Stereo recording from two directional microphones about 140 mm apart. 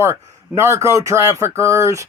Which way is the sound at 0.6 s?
20° right (ahead or behind).